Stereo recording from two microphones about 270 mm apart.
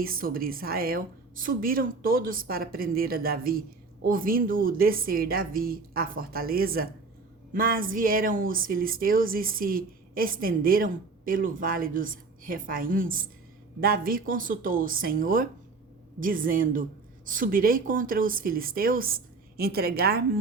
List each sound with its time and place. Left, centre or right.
0.0 s speech: right